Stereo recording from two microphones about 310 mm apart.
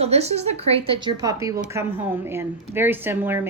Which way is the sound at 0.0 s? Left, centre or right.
Centre.